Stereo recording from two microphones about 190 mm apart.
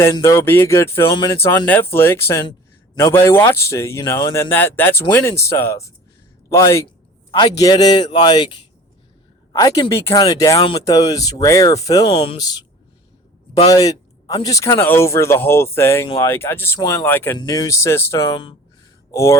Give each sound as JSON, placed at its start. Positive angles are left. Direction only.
{"t": 0.0, "sound": "a man's voice", "side_deg": 15}
{"t": 12.0, "sound": "speech", "side_deg": 30}
{"t": 13.7, "sound": "speech", "side_deg": 20}